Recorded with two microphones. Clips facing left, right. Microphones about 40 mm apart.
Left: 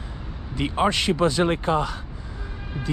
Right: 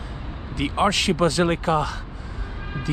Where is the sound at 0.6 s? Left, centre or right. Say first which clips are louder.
Right 1 dB; right.